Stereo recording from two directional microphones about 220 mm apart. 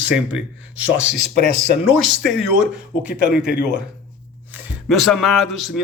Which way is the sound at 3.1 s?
50° left (ahead or behind).